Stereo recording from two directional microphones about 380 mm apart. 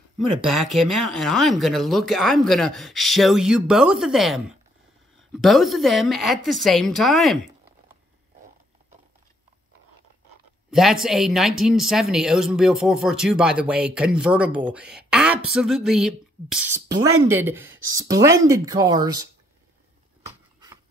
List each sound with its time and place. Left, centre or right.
0.5 s a woman's voice: centre
10.7 s speech: centre